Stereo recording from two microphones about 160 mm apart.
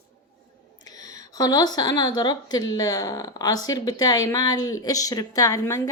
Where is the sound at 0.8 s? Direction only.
25° left (ahead or behind).